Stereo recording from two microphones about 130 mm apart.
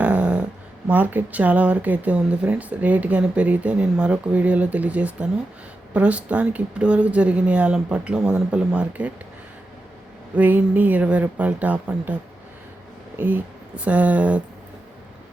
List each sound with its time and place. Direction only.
0.0 s dog: 10° right (ahead or behind)
0.9 s speech: 15° right (ahead or behind)
10.3 s speech: 10° right (ahead or behind)
13.1 s speech: 15° right (ahead or behind)